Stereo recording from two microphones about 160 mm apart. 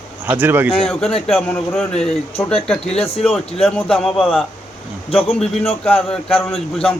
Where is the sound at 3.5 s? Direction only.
35° left (ahead or behind).